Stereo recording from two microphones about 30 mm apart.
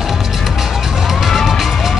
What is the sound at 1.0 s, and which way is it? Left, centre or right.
Music, centre.